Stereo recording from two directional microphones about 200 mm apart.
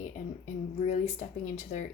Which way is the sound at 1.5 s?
35° left (ahead or behind).